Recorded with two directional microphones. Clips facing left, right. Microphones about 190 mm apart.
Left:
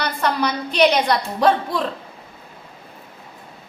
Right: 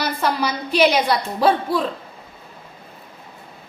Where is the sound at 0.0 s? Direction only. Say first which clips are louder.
Even; 5° right (ahead or behind).